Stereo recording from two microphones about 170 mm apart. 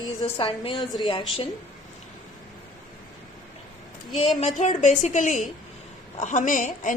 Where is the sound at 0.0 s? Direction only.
30° left (ahead or behind).